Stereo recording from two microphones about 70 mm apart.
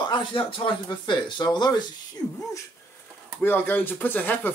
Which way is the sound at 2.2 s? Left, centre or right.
Left.